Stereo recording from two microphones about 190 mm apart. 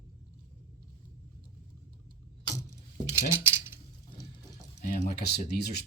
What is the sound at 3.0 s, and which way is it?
Cutlery, 15° right (ahead or behind).